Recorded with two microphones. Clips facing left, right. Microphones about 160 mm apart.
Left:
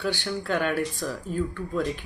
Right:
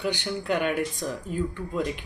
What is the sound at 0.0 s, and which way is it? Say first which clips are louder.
Speech: even; 15° right (ahead or behind).